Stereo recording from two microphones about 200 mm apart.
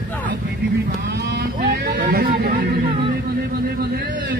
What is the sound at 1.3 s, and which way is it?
Vehicle, 50° right (ahead or behind).